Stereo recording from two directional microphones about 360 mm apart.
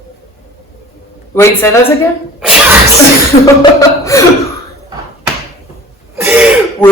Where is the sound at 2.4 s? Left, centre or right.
Centre.